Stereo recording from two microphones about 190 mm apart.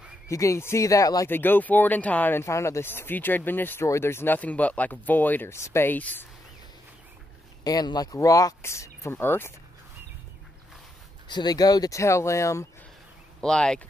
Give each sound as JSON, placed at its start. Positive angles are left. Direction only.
{"t": 0.3, "sound": "speech", "side_deg": 15}
{"t": 7.6, "sound": "speech", "side_deg": 20}
{"t": 11.2, "sound": "speech", "side_deg": 20}
{"t": 13.4, "sound": "speech", "side_deg": 5}